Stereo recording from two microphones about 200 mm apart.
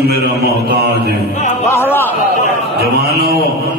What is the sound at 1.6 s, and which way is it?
Speech, 10° left (ahead or behind).